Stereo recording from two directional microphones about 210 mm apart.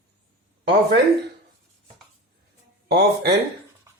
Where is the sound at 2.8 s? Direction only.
50° right (ahead or behind).